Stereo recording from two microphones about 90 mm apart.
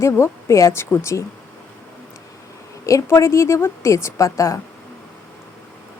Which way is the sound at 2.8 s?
35° left (ahead or behind).